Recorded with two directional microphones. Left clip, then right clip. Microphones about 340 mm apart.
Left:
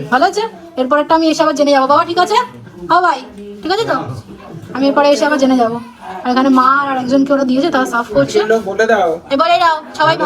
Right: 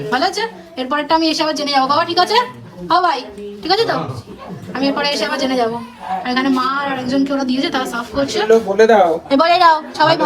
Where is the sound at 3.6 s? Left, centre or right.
Centre.